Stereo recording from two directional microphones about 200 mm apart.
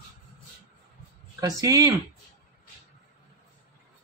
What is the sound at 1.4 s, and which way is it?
Speech, 15° right (ahead or behind).